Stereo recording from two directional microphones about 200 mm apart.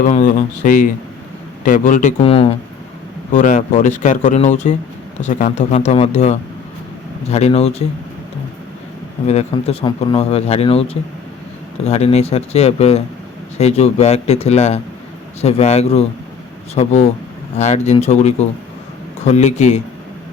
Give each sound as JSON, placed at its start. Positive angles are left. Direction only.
{"t": 0.0, "sound": "speech", "side_deg": 40}
{"t": 9.2, "sound": "speech", "side_deg": 30}